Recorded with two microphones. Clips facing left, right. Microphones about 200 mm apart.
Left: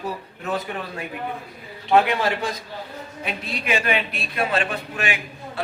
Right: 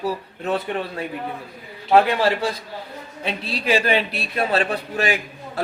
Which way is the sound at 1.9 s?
35° right (ahead or behind).